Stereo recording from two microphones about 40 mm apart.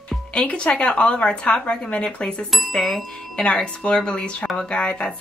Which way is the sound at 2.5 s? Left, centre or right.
Centre.